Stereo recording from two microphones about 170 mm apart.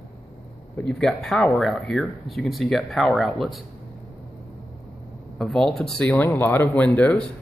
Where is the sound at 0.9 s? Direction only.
5° left (ahead or behind).